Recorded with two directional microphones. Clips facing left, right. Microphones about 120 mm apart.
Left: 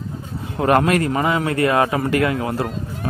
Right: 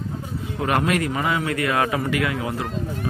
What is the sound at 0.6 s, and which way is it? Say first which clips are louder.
A man's voice: left 5 dB; 40° left (ahead or behind).